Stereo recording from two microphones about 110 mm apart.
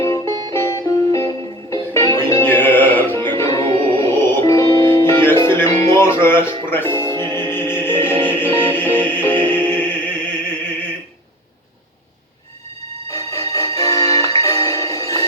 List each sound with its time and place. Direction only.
0.0 s music: 30° left (ahead or behind)
2.4 s music: 20° left (ahead or behind)
3.6 s music: 55° right (ahead or behind)
4.1 s music: 25° left (ahead or behind)
13.1 s music: 30° left (ahead or behind)